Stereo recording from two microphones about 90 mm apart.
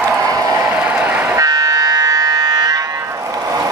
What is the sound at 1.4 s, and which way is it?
Buzzer, 45° right (ahead or behind).